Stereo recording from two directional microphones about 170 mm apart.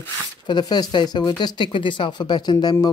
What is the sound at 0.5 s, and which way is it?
Speech, 25° left (ahead or behind).